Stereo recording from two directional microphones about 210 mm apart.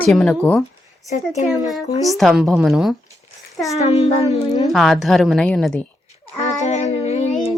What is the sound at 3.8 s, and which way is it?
Speech, 30° left (ahead or behind).